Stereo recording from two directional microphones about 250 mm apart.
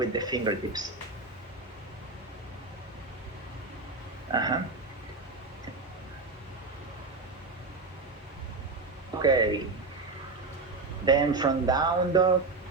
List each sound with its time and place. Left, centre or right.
0.0 s speech: centre
4.3 s a sound: centre
9.1 s speech: centre
11.0 s speech: centre